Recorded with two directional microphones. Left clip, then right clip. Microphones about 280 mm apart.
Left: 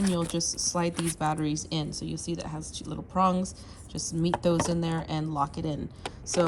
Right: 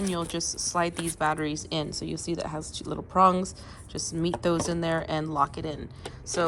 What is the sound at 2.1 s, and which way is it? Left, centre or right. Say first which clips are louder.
Speech: right 6 dB; centre.